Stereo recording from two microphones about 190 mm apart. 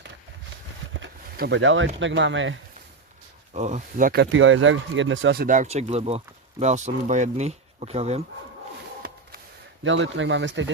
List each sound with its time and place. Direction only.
1.4 s speech: 70° right (ahead or behind)
3.5 s speech: 40° right (ahead or behind)
4.2 s speech: 90° right
5.4 s speech: 40° right (ahead or behind)
9.8 s speech: 80° right